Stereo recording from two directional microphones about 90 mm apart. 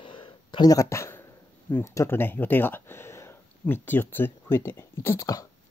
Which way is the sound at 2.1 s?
20° left (ahead or behind).